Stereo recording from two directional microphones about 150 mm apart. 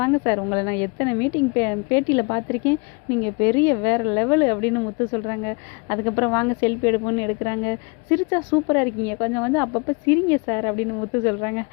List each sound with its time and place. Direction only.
0.0 s a woman's voice: 20° left (ahead or behind)